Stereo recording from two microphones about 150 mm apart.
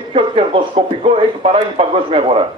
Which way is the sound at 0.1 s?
35° right (ahead or behind).